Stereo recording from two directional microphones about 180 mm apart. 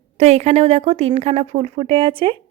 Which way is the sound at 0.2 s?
35° right (ahead or behind).